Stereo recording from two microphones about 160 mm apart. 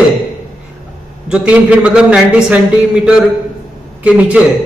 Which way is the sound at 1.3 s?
5° right (ahead or behind).